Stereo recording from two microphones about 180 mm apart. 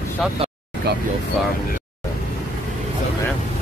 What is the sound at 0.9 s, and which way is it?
Speech, 65° right (ahead or behind).